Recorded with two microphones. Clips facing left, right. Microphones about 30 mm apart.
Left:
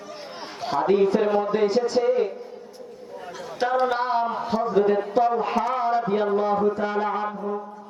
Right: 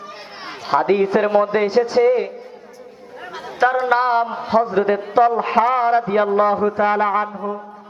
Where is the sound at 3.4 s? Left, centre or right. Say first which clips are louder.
Right 7 dB; right.